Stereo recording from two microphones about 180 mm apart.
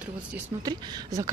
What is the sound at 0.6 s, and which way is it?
Speech, 20° right (ahead or behind).